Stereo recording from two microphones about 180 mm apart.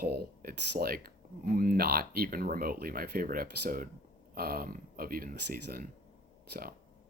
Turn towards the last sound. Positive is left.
turn(degrees=-55)  # may be behind; listen again after turning